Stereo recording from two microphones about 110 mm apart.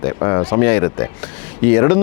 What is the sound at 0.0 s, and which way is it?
A man's voice, 25° left (ahead or behind).